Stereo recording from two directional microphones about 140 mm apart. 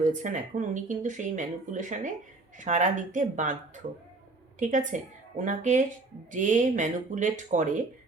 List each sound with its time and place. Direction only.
0.0 s speech: 60° right (ahead or behind)